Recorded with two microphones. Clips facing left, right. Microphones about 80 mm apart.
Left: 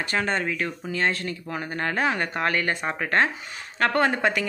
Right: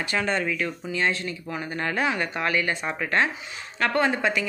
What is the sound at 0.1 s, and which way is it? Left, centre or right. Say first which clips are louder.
A woman's voice: even; left.